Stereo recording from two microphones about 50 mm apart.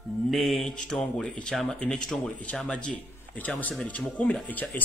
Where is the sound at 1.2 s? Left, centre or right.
Centre.